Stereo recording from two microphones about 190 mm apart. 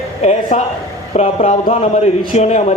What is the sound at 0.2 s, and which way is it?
A woman's voice, 35° left (ahead or behind).